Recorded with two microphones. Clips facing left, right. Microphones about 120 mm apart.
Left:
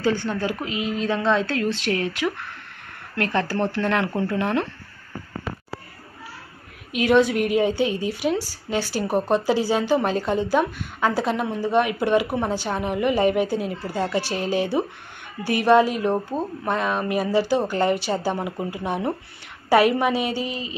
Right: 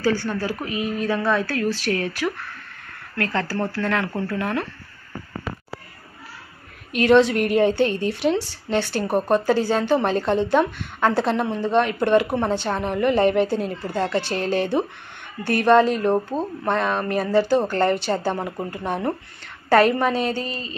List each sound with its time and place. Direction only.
0.0 s speech: 20° left (ahead or behind)
6.9 s a woman's voice: 5° left (ahead or behind)